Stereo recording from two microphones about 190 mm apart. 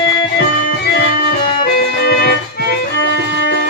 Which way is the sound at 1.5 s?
55° left (ahead or behind).